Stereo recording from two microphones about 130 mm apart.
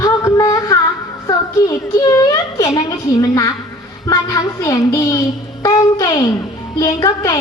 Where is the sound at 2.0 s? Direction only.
25° left (ahead or behind).